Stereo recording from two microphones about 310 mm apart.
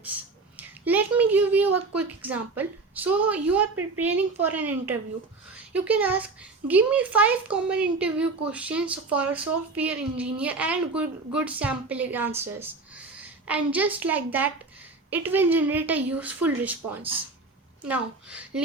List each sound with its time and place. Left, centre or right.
0.0 s a sound: centre
1.7 s a woman's voice: right
2.2 s a woman's voice: centre
13.7 s a woman's voice: centre